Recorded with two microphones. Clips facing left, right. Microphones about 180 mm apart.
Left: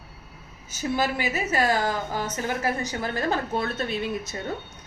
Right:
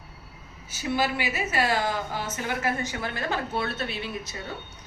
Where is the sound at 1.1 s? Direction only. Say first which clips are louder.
Left 2 dB; 40° left (ahead or behind).